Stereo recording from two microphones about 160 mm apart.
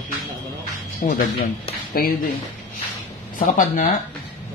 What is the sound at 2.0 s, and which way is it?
Speech, 65° left (ahead or behind).